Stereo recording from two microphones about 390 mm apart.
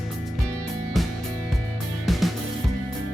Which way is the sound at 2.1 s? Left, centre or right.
Centre.